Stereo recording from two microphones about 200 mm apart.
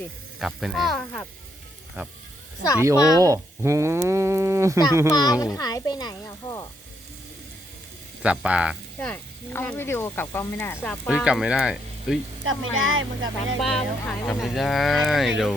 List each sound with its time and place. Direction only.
0.3 s speech: centre (ahead or behind)
2.0 s speech: 10° right (ahead or behind)
2.9 s speech: 15° left (ahead or behind)
3.2 s speech: 15° right (ahead or behind)
5.1 s speech: 20° left (ahead or behind)
8.2 s speech: 5° right (ahead or behind)
9.0 s speech: 5° left (ahead or behind)
11.1 s speech: 5° right (ahead or behind)
12.5 s speech: 85° right
14.1 s speech: 5° left (ahead or behind)